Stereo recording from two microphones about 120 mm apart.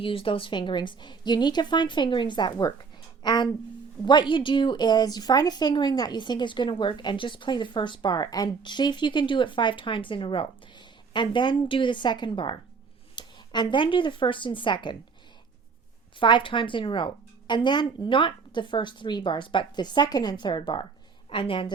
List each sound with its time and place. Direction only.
0.0 s a woman's voice: 50° left (ahead or behind)
16.2 s a woman's voice: 45° left (ahead or behind)